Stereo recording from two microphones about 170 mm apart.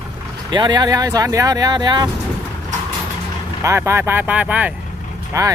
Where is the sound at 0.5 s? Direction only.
25° right (ahead or behind).